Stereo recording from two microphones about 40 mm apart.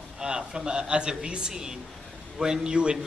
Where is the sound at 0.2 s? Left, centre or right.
Centre.